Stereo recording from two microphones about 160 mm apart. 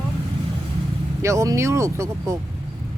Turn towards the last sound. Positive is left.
turn(degrees=-20)  # may be behind; listen again after turning